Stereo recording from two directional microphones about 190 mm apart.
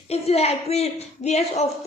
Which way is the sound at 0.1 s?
35° left (ahead or behind).